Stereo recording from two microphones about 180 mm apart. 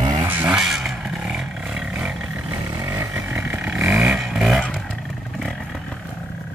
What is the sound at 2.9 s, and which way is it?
Vehicle, 10° right (ahead or behind).